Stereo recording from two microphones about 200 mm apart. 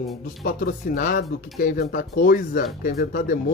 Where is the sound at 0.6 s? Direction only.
45° left (ahead or behind).